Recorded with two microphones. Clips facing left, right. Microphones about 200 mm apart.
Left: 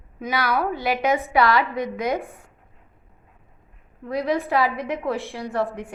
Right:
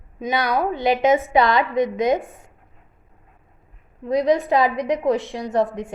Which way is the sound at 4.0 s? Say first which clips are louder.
Right 5 dB; 20° right (ahead or behind).